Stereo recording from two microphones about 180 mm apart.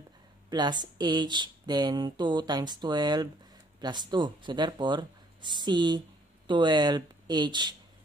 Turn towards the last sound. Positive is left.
turn(degrees=-25)  # may be behind; listen again after turning